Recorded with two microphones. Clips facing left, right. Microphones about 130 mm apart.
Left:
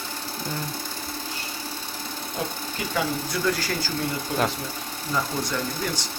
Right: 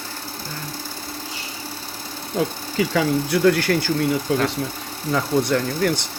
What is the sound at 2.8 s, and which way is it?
Speech, 80° right.